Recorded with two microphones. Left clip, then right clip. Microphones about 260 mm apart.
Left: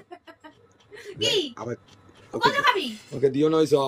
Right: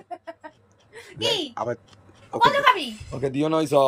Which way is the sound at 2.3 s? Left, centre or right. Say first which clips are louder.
Right 3 dB; centre.